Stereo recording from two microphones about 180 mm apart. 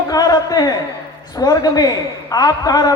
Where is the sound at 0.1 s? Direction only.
20° left (ahead or behind).